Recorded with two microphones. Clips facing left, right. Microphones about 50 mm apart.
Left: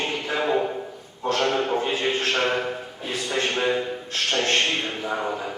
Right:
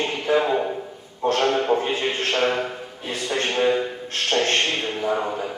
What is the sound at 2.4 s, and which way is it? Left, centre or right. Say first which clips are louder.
A man's voice: right 1 dB; centre.